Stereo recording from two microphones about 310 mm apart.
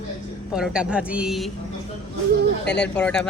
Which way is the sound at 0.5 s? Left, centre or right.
Centre.